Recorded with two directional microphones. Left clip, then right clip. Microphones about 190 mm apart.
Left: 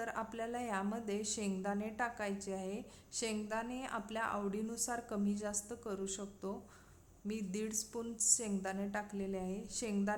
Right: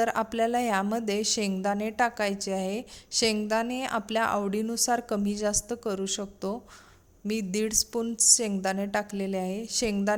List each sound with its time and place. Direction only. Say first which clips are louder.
0.0 s a woman's voice: right 15 dB; 45° right (ahead or behind)